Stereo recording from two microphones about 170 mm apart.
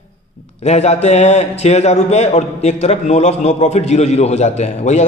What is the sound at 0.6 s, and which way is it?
A man's voice, 40° left (ahead or behind).